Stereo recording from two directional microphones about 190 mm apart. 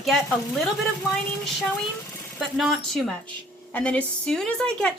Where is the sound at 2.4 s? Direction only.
Centre (ahead or behind).